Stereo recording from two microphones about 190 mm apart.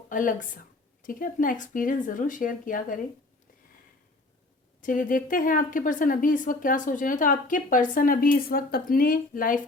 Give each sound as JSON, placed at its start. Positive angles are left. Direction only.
{"t": 0.1, "sound": "a woman's voice", "side_deg": 45}
{"t": 4.8, "sound": "a woman's voice", "side_deg": 45}